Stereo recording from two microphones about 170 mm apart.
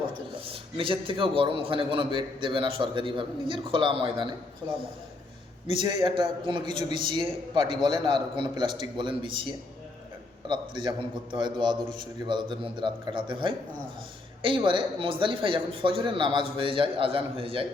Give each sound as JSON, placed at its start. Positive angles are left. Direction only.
{"t": 0.3, "sound": "a man's voice", "side_deg": -30}
{"t": 5.7, "sound": "a man's voice", "side_deg": -30}